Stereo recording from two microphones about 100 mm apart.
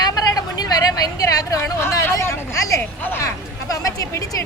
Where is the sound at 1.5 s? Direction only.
25° left (ahead or behind).